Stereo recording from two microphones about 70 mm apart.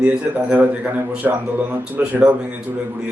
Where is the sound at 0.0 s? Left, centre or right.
Right.